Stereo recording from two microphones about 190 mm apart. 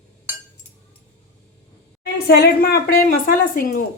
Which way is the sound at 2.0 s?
55° left (ahead or behind).